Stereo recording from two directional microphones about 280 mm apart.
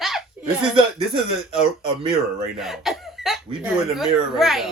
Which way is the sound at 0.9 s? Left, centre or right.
Centre.